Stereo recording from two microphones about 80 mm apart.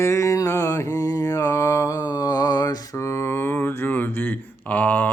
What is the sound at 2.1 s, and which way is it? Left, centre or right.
Mantra, left.